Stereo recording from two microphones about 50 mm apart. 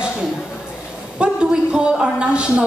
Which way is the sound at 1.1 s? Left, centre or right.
Right.